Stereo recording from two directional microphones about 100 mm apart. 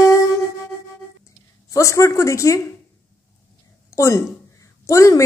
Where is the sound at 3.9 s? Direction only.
30° left (ahead or behind).